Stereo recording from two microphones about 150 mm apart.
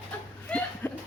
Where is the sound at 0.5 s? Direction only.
10° left (ahead or behind).